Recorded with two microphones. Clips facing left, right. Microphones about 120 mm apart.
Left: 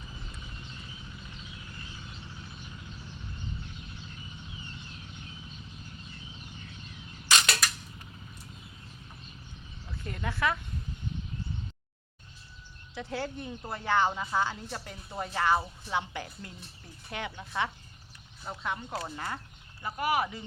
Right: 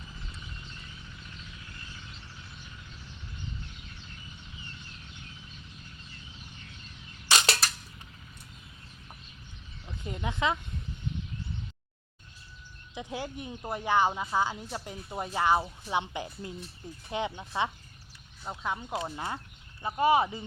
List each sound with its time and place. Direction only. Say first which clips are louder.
7.3 s a sound: right 1 dB; 30° right (ahead or behind)
9.8 s speech: right 1 dB; 20° right (ahead or behind)
12.9 s speech: left 1 dB; 15° right (ahead or behind)